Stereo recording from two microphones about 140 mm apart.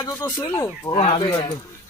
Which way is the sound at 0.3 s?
20° left (ahead or behind).